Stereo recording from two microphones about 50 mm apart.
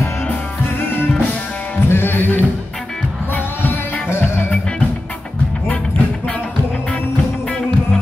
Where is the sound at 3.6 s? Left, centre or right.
Left.